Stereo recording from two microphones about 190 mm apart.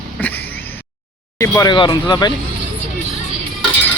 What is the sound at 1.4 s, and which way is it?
Speech, 15° left (ahead or behind).